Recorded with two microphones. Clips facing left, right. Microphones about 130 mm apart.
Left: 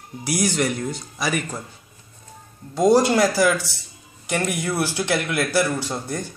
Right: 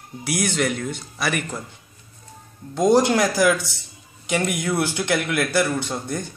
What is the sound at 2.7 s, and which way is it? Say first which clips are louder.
Speech: left 1 dB; 5° left (ahead or behind).